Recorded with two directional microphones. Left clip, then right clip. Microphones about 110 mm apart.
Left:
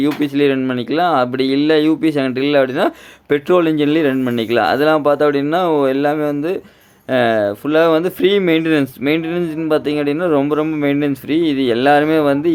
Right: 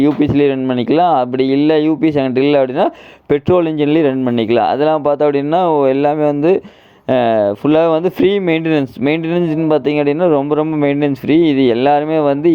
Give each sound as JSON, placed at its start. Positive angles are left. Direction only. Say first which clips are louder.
{"t": 0.0, "sound": "speech", "louder": "right 3 dB", "side_deg": -25}